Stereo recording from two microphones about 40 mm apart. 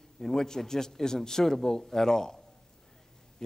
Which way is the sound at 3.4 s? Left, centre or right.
Centre.